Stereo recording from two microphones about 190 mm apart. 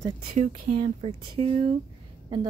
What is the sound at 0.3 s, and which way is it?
Speech, 40° right (ahead or behind).